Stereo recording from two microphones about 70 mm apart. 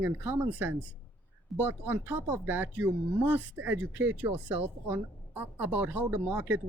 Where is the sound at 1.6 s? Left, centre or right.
Right.